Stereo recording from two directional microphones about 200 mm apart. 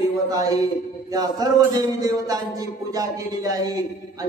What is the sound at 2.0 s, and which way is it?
A man's voice, 20° right (ahead or behind).